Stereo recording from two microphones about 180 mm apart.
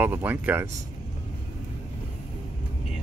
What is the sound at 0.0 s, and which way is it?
Speech, 10° right (ahead or behind).